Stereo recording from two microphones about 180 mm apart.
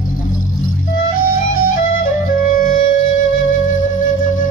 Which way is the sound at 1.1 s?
50° left (ahead or behind).